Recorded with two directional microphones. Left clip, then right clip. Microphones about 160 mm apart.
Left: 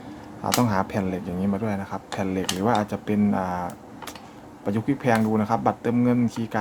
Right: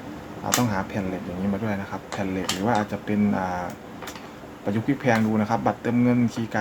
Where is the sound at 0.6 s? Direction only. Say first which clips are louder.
Left 3 dB; 35° left (ahead or behind).